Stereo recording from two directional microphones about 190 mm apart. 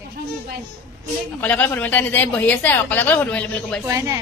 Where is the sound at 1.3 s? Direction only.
10° left (ahead or behind).